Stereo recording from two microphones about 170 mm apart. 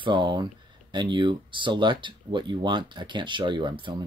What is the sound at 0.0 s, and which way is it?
Speech, 25° right (ahead or behind).